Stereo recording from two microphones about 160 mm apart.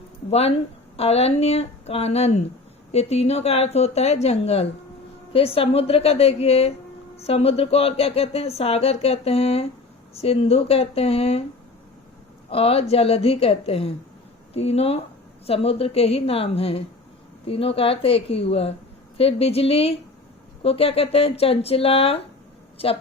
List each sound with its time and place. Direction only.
0.3 s speech: 40° left (ahead or behind)
12.5 s speech: 35° left (ahead or behind)